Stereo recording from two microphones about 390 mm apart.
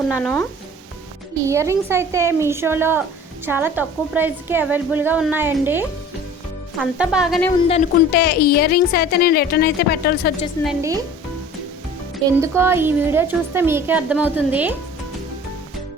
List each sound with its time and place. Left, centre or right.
0.1 s a woman's voice: centre
1.5 s a woman's voice: centre
7.7 s a woman's voice: left
10.6 s a woman's voice: centre
12.4 s a woman's voice: centre